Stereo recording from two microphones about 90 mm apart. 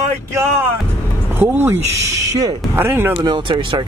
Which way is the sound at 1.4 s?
25° right (ahead or behind).